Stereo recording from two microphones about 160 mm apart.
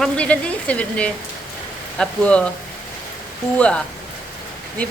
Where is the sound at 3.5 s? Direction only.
5° left (ahead or behind).